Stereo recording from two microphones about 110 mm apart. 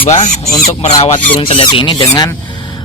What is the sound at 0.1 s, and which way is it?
Speech, 90° left.